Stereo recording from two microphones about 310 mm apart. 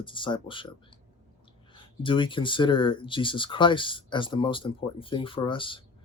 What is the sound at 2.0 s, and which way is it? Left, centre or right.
Speech, centre.